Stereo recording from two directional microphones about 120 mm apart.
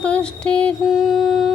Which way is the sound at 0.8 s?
Centre (ahead or behind).